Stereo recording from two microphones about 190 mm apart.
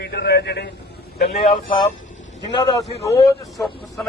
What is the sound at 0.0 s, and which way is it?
Speech, 60° left (ahead or behind).